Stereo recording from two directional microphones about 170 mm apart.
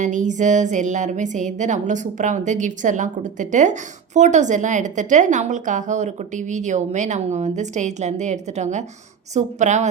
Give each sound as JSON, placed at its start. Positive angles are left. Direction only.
{"t": 0.0, "sound": "a woman's voice", "side_deg": -45}